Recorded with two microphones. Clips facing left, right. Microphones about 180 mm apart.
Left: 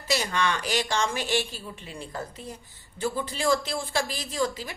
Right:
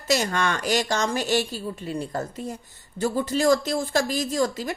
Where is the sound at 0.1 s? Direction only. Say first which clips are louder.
Right 3 dB; 45° right (ahead or behind).